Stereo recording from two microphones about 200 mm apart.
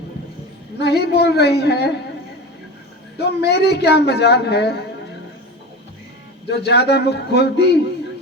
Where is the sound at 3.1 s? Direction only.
55° left (ahead or behind).